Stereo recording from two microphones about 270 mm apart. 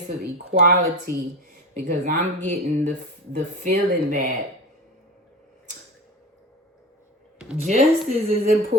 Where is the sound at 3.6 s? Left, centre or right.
Right.